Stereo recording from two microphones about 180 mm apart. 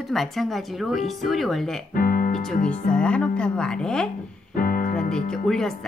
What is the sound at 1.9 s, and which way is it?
Music, 50° left (ahead or behind).